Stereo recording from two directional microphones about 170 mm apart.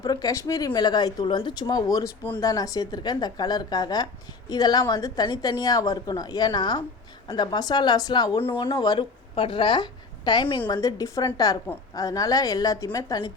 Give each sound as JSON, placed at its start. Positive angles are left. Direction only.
{"t": 0.0, "sound": "speech", "side_deg": 20}